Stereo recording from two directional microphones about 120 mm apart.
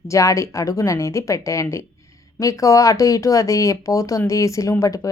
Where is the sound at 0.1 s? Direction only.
25° left (ahead or behind).